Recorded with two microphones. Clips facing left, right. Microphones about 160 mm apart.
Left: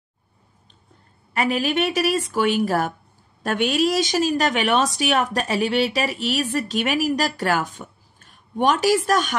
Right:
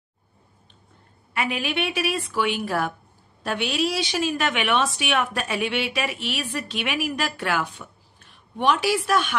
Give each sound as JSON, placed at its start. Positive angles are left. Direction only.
{"t": 1.3, "sound": "a woman's voice", "side_deg": 40}